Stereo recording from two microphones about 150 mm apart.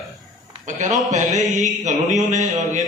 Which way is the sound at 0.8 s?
55° right (ahead or behind).